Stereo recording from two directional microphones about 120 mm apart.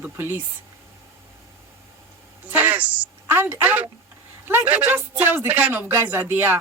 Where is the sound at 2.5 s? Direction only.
15° right (ahead or behind).